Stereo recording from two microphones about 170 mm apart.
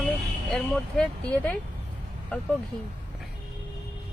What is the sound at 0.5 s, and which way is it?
Speech, 5° left (ahead or behind).